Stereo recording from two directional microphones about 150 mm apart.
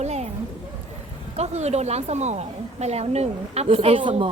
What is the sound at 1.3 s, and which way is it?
A woman's voice, 45° right (ahead or behind).